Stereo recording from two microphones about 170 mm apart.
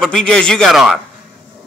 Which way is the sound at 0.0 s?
5° left (ahead or behind).